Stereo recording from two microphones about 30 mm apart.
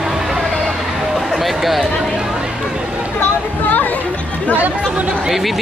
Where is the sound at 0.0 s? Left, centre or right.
Centre.